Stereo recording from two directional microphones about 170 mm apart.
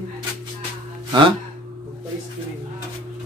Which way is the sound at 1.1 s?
30° right (ahead or behind).